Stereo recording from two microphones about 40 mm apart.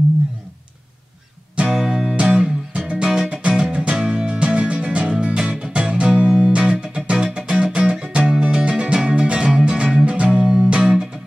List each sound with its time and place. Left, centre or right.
1.6 s music: centre